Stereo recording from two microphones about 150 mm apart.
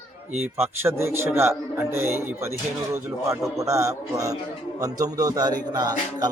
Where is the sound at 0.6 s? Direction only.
15° right (ahead or behind).